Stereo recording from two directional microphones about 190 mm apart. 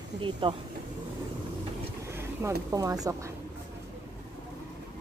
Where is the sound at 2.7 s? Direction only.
20° right (ahead or behind).